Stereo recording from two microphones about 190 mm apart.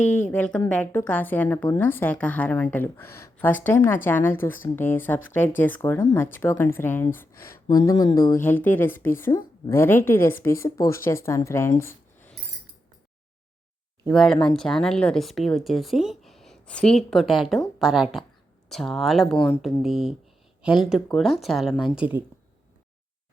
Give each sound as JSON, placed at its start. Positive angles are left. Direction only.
{"t": 0.0, "sound": "a woman's voice", "side_deg": 10}
{"t": 14.1, "sound": "speech", "side_deg": 0}